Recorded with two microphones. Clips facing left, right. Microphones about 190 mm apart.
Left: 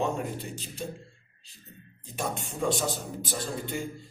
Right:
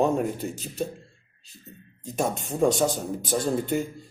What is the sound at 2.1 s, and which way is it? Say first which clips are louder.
Speech: right 6 dB; 45° right (ahead or behind).